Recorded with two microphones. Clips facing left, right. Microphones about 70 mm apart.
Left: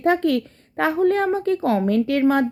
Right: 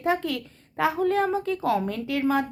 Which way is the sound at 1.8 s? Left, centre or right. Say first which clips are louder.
Left 7 dB; left.